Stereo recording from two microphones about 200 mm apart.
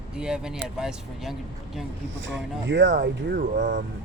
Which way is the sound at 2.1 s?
65° right (ahead or behind).